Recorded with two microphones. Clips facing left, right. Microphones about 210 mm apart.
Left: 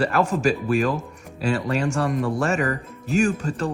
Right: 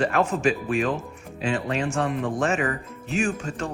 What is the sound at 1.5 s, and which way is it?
Speech, 40° left (ahead or behind).